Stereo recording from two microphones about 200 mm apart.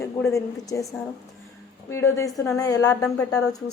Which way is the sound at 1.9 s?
15° left (ahead or behind).